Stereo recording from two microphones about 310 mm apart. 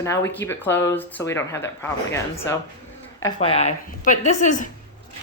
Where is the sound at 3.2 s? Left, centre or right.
Centre.